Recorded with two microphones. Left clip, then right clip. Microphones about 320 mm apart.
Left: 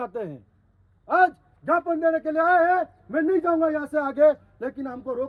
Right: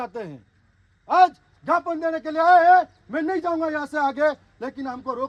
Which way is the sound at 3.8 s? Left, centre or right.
Centre.